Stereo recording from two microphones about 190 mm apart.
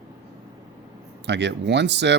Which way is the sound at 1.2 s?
65° right (ahead or behind).